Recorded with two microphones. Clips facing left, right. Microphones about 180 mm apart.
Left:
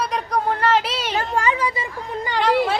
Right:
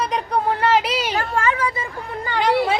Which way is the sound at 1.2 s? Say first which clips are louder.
Left 3 dB; 15° left (ahead or behind).